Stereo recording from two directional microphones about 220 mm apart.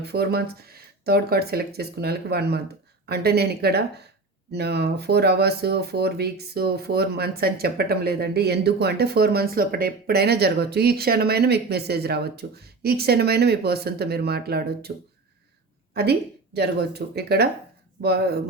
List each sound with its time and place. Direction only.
0.0 s speech: 45° right (ahead or behind)
16.6 s speech: 50° right (ahead or behind)